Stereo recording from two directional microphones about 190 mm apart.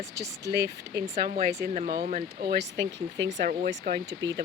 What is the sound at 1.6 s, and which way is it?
Speech, 45° right (ahead or behind).